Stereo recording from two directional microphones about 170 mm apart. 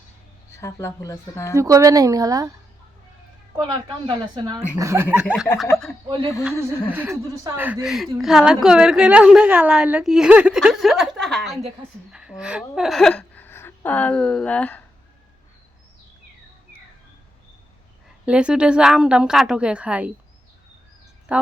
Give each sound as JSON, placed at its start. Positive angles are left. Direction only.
{"t": 0.5, "sound": "speech", "side_deg": 15}
{"t": 1.5, "sound": "speech", "side_deg": -20}
{"t": 3.6, "sound": "speech", "side_deg": -25}
{"t": 4.8, "sound": "a sound", "side_deg": -15}
{"t": 6.6, "sound": "a sound", "side_deg": -15}
{"t": 7.4, "sound": "a woman's voice", "side_deg": -10}
{"t": 18.3, "sound": "a woman's voice", "side_deg": -5}
{"t": 21.3, "sound": "a woman's voice", "side_deg": -5}